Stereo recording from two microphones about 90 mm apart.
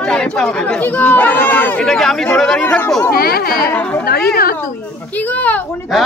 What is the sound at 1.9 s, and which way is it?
Speech, 5° left (ahead or behind).